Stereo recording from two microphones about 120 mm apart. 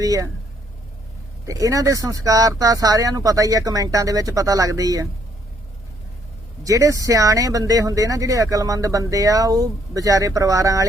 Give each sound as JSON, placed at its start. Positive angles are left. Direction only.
{"t": 0.0, "sound": "speech", "side_deg": -30}
{"t": 1.5, "sound": "speech", "side_deg": -30}
{"t": 6.7, "sound": "speech", "side_deg": -30}